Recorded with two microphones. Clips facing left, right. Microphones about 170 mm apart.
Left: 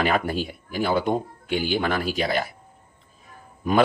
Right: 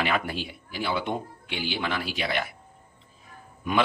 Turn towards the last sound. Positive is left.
turn(degrees=35)  # may be behind; listen again after turning